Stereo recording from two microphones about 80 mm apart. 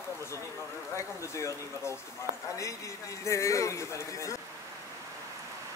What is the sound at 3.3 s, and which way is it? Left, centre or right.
A man's voice, left.